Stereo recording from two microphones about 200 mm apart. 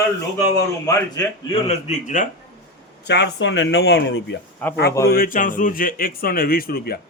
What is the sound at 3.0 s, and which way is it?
Speech, 55° left (ahead or behind).